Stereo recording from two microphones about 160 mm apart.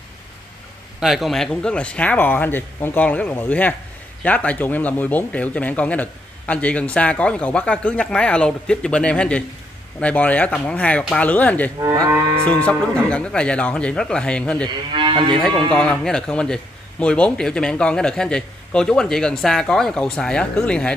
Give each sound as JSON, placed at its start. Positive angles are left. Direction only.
{"t": 1.0, "sound": "speech", "side_deg": 0}
{"t": 15.0, "sound": "moo", "side_deg": -30}
{"t": 15.7, "sound": "a man's voice", "side_deg": 5}